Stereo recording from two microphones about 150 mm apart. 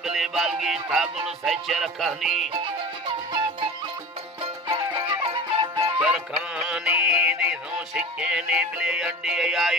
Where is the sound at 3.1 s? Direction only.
35° right (ahead or behind).